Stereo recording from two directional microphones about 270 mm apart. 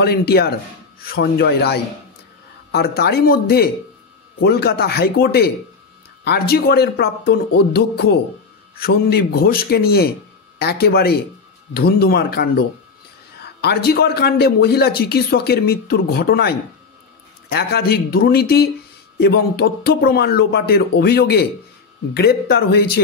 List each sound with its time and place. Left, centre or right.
0.0 s speech: left